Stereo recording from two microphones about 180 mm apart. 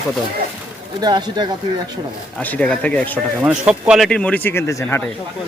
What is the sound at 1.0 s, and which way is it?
Speech, 25° right (ahead or behind).